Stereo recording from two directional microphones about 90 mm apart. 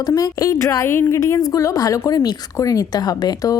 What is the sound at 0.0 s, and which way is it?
A woman's voice, 45° left (ahead or behind).